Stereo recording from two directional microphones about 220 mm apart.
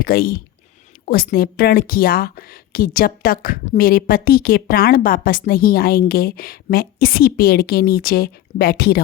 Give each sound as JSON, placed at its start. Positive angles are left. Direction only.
{"t": 0.0, "sound": "a woman's voice", "side_deg": 40}